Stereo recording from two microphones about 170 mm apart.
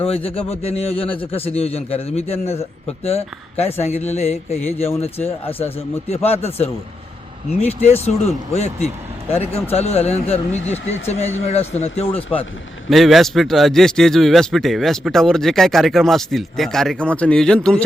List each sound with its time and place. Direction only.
0.0 s a man's voice: 35° left (ahead or behind)
7.9 s a man's voice: 40° left (ahead or behind)
12.9 s a man's voice: centre (ahead or behind)